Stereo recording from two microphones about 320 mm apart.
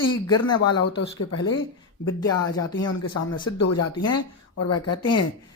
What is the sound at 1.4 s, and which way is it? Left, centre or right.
Speech, centre.